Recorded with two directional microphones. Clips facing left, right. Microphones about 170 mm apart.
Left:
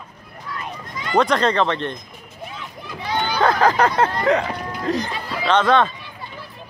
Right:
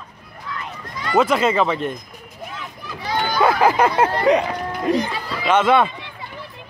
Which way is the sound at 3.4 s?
10° right (ahead or behind).